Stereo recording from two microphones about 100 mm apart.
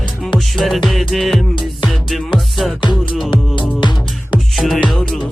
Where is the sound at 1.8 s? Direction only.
Centre (ahead or behind).